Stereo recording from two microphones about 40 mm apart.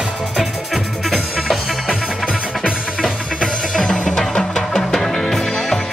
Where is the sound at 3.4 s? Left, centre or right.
Centre.